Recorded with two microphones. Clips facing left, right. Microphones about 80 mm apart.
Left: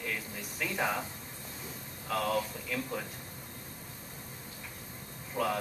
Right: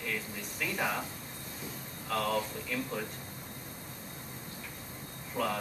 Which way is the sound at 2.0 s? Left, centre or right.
Centre.